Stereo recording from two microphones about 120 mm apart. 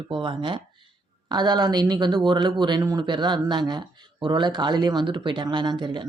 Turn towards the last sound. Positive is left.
turn(degrees=-40)  # may be behind; listen again after turning